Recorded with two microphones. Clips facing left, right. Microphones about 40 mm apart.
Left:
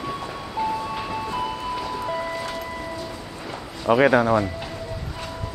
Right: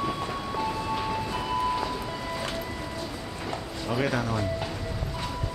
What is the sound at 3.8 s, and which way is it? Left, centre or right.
Speech, left.